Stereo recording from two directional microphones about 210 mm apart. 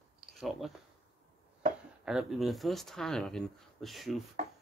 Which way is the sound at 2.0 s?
Centre (ahead or behind).